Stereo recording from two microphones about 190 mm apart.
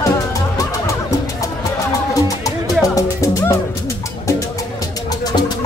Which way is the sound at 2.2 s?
20° left (ahead or behind).